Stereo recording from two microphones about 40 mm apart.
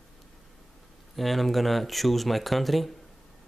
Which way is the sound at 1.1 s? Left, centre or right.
Centre.